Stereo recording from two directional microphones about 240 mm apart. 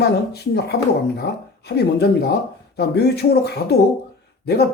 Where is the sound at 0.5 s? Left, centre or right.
Left.